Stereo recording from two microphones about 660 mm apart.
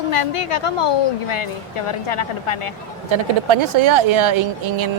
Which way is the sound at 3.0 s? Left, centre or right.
Right.